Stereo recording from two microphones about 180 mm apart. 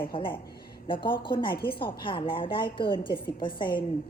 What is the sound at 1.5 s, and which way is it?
Speech, 60° left (ahead or behind).